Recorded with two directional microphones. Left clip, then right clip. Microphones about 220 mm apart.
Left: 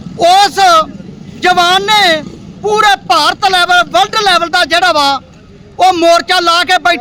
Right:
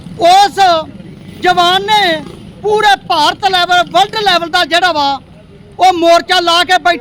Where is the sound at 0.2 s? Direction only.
10° left (ahead or behind).